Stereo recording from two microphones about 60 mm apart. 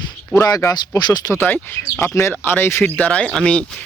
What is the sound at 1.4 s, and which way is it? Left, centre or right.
Speech, left.